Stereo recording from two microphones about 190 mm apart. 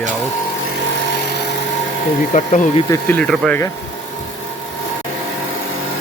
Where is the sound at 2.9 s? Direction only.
10° left (ahead or behind).